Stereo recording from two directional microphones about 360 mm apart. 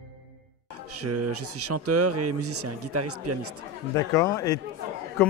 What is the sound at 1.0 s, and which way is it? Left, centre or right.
Speech, right.